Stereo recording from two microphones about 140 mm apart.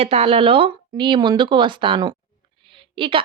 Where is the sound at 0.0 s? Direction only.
45° right (ahead or behind).